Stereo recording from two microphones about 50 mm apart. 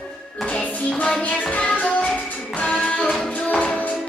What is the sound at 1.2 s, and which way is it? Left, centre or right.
Music, left.